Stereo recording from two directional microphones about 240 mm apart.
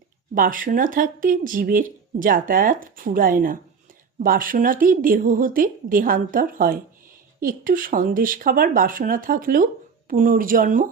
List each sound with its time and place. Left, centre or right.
0.3 s speech: right